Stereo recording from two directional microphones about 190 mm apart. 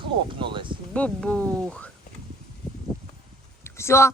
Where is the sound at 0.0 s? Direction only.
25° right (ahead or behind).